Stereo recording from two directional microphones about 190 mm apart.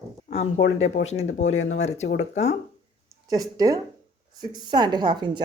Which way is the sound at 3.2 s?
20° right (ahead or behind).